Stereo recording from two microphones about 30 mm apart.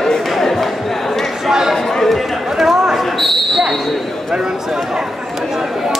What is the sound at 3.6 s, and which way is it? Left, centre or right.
Speech, centre.